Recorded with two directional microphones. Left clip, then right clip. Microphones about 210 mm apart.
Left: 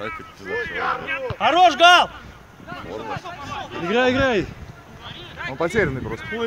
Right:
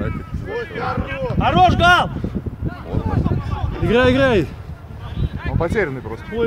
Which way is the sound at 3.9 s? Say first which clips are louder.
Right 4 dB; 55° right (ahead or behind).